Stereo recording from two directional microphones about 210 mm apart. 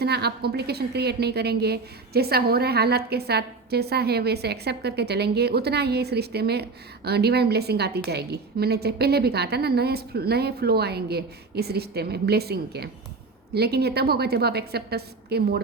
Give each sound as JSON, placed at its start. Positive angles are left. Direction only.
{"t": 0.0, "sound": "a woman's voice", "side_deg": -50}